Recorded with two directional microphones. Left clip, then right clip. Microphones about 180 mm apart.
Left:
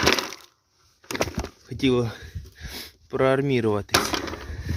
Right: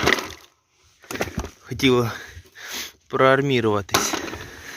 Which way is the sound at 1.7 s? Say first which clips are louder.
Right 4 dB; centre (ahead or behind).